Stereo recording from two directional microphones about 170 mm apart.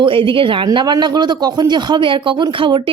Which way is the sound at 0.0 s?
30° right (ahead or behind).